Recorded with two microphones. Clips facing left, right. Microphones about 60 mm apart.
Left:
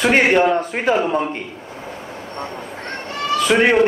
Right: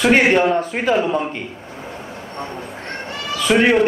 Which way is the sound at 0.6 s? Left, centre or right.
Left.